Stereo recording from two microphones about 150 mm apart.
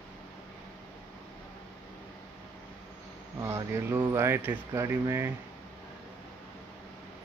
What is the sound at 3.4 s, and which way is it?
Speech, 20° right (ahead or behind).